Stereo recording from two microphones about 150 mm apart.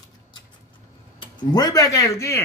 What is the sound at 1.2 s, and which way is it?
A man's voice, 30° left (ahead or behind).